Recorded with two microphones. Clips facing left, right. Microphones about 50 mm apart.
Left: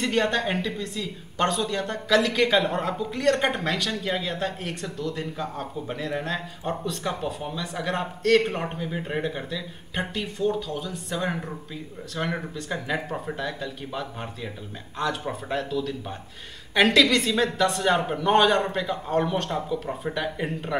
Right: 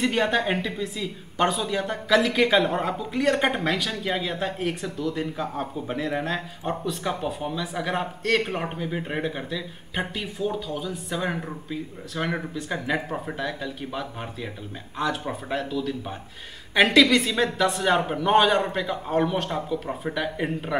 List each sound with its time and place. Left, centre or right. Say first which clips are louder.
0.0 s a woman's voice: right 1 dB; centre